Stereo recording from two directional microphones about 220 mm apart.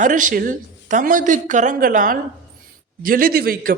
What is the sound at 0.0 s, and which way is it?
A woman's voice, 35° right (ahead or behind).